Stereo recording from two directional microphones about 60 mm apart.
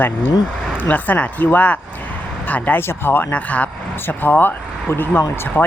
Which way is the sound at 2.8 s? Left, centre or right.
Left.